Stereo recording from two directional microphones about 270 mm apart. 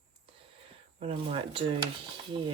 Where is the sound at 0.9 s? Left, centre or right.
Centre.